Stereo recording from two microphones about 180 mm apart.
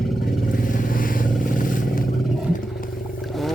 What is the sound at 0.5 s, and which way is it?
Vehicle, 50° left (ahead or behind).